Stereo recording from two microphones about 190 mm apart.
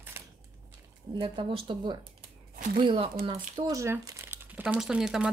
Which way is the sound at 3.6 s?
15° right (ahead or behind).